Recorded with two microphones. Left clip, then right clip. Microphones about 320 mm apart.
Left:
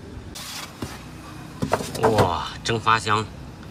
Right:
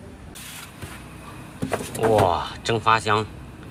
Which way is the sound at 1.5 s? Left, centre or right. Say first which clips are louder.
Left 2 dB; left.